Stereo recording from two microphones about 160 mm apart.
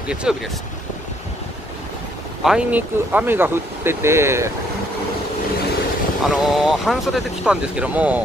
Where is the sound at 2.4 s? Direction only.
5° right (ahead or behind).